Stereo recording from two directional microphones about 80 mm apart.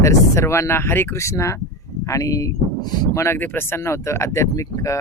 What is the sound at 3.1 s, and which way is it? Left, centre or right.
Speech, left.